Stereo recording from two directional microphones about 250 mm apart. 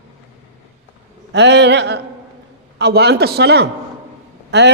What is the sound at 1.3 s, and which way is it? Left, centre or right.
A man's voice, right.